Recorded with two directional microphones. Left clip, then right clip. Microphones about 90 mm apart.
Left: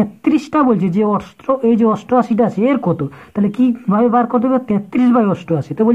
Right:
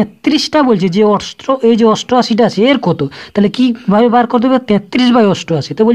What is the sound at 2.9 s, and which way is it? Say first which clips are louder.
Speech: right 5 dB; 40° right (ahead or behind).